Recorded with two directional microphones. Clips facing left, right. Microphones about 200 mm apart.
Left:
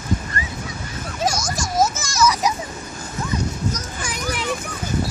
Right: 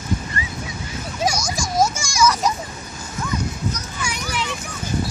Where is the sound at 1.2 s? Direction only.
5° left (ahead or behind).